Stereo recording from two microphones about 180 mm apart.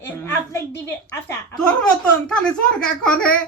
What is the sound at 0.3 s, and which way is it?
A woman's voice, 15° left (ahead or behind).